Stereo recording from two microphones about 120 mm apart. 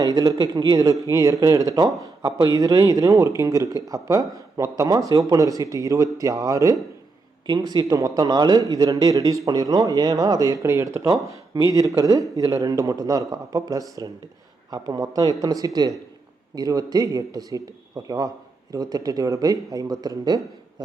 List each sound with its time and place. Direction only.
0.0 s speech: 30° right (ahead or behind)